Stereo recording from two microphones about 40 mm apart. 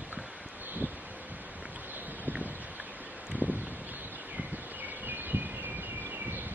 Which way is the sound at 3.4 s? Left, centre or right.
Right.